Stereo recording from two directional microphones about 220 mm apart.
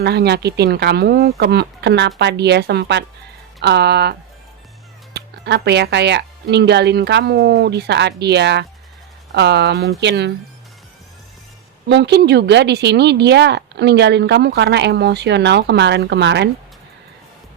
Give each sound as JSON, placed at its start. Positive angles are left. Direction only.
{"t": 0.0, "sound": "a woman's voice", "side_deg": -50}
{"t": 5.1, "sound": "a woman's voice", "side_deg": -50}
{"t": 11.9, "sound": "a woman's voice", "side_deg": -50}